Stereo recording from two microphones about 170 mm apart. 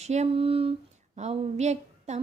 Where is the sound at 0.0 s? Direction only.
40° right (ahead or behind).